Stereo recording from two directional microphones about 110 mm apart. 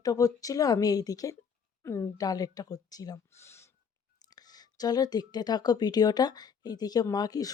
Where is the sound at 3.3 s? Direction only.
25° left (ahead or behind).